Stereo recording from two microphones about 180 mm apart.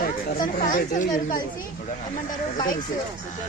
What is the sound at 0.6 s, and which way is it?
Speech, 45° left (ahead or behind).